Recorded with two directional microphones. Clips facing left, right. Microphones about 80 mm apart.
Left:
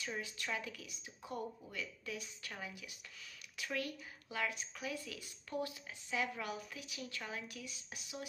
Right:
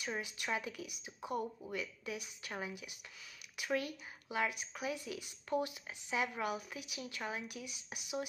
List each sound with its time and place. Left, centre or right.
0.0 s speech: centre